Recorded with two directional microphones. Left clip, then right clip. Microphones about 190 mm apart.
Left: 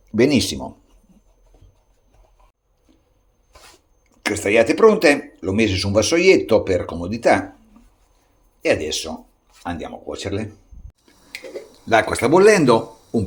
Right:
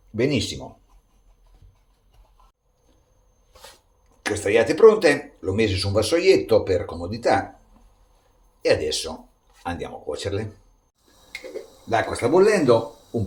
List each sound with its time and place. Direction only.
0.2 s speech: 40° left (ahead or behind)
4.2 s speech: 35° left (ahead or behind)
8.6 s speech: 25° left (ahead or behind)
11.9 s speech: 50° left (ahead or behind)